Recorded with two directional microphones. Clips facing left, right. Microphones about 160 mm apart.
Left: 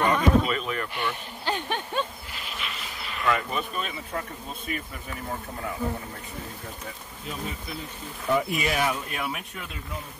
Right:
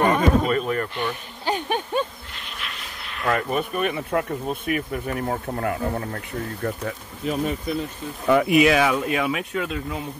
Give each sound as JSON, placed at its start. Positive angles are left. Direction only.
{"t": 0.0, "sound": "a sound", "side_deg": -45}
{"t": 1.4, "sound": "speech", "side_deg": -15}
{"t": 2.3, "sound": "vehicle", "side_deg": 0}
{"t": 3.3, "sound": "speech", "side_deg": -55}
{"t": 8.3, "sound": "speech", "side_deg": -80}